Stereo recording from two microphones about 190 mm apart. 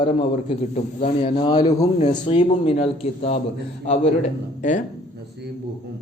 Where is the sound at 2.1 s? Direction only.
30° left (ahead or behind).